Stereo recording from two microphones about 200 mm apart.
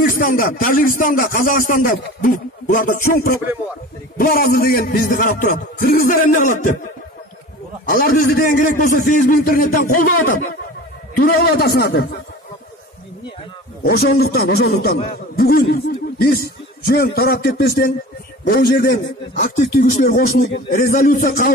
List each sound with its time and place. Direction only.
0.0 s speech: 45° left (ahead or behind)
7.9 s speech: 45° left (ahead or behind)
13.8 s speech: 45° left (ahead or behind)
19.3 s speech: 40° left (ahead or behind)